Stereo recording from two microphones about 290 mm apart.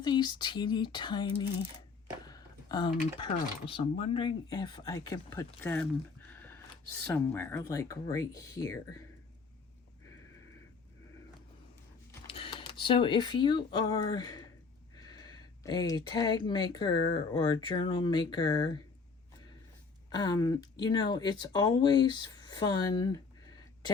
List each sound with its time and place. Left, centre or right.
0.0 s speech: centre
2.2 s a sound: centre
3.7 s speech: centre
12.3 s typing: centre
12.8 s speech: centre
14.9 s a sound: centre
16.1 s speech: centre
20.1 s speech: centre